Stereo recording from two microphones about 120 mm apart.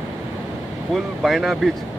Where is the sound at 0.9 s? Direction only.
Centre (ahead or behind).